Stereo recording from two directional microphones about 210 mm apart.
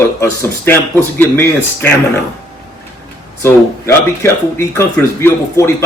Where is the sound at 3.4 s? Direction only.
10° left (ahead or behind).